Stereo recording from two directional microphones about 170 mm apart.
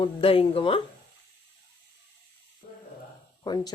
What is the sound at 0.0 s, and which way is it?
Speech, 35° left (ahead or behind).